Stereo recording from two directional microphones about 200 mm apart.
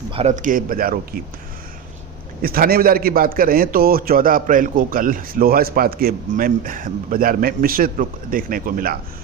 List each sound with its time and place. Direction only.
0.1 s a man's voice: 30° right (ahead or behind)
2.4 s a man's voice: 45° right (ahead or behind)